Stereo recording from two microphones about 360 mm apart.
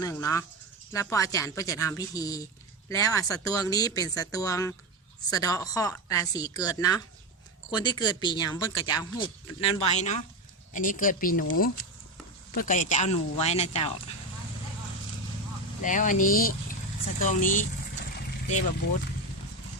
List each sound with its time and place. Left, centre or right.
0.0 s speech: centre
15.8 s speech: left
18.2 s vehicle: centre